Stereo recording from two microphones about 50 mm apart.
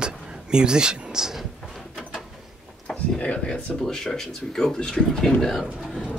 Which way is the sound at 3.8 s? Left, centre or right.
Centre.